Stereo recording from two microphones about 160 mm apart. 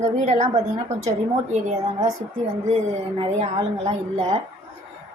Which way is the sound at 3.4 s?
45° right (ahead or behind).